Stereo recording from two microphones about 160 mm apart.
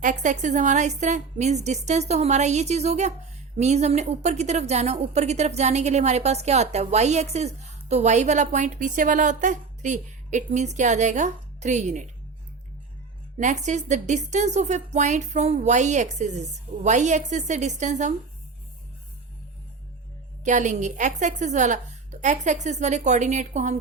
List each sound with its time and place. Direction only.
0.0 s a woman's voice: 50° right (ahead or behind)
13.4 s a woman's voice: 45° right (ahead or behind)
20.4 s a woman's voice: 50° right (ahead or behind)